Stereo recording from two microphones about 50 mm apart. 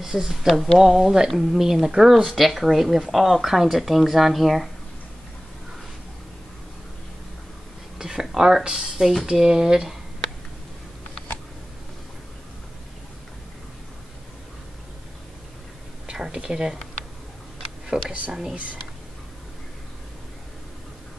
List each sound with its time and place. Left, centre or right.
0.0 s speech: centre
8.0 s speech: centre
16.2 s a sound: centre
17.9 s speech: right
18.3 s speech: centre